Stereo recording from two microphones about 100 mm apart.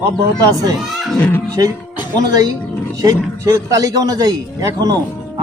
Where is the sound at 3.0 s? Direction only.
35° right (ahead or behind).